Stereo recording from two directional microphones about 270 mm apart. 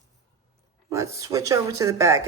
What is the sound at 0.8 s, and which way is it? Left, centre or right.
A woman's voice, centre.